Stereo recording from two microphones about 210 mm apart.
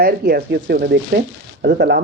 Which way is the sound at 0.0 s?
50° right (ahead or behind).